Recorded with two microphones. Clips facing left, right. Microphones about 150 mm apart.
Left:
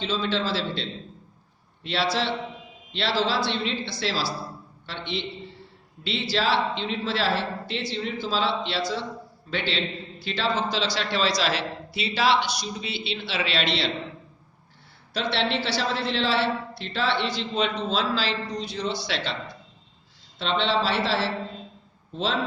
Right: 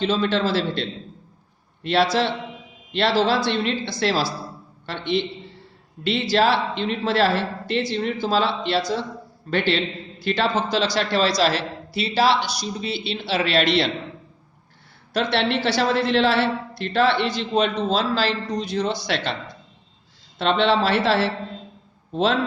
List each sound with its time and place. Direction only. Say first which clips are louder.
0.0 s a man's voice: right 6 dB; 50° right (ahead or behind)
15.1 s a man's voice: right 4 dB; 50° right (ahead or behind)
20.4 s a man's voice: right 5 dB; 55° right (ahead or behind)